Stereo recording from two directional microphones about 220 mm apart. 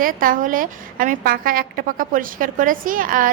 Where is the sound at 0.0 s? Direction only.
40° right (ahead or behind).